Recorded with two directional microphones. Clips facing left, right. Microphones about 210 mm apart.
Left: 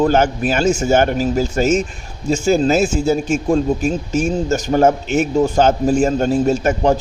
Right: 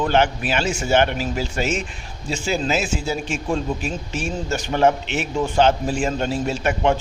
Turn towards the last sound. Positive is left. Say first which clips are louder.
# left 5 dB
turn(degrees=40)  # may be behind; listen again after turning